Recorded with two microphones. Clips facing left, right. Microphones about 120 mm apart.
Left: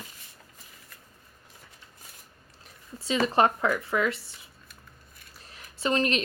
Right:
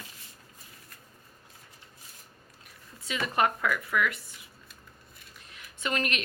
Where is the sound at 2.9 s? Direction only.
30° left (ahead or behind).